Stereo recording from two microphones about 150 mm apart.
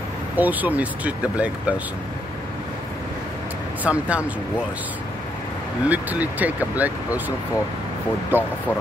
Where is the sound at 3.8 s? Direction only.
10° right (ahead or behind).